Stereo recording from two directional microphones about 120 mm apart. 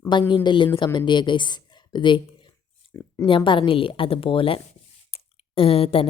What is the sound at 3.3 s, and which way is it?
A woman's voice, 45° left (ahead or behind).